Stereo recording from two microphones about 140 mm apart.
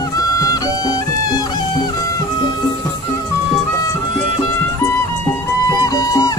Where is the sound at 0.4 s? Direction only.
25° left (ahead or behind).